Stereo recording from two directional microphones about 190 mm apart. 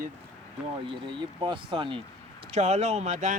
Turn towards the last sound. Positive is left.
turn(degrees=-40)  # may be behind; listen again after turning